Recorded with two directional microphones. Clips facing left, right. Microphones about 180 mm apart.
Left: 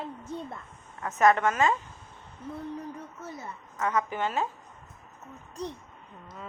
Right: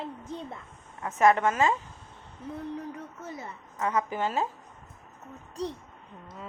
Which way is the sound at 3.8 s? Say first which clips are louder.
Even; 30° right (ahead or behind).